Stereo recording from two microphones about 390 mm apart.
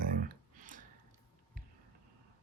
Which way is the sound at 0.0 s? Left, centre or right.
Right.